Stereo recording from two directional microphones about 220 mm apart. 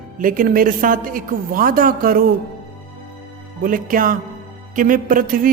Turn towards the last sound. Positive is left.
turn(degrees=-40)  # may be behind; listen again after turning